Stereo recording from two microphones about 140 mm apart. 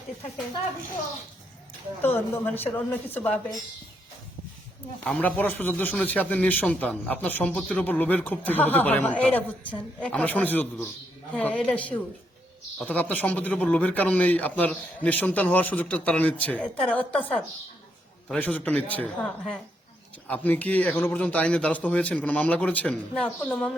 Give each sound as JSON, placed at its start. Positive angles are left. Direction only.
{"t": 2.0, "sound": "speech", "side_deg": 15}
{"t": 5.0, "sound": "speech", "side_deg": 10}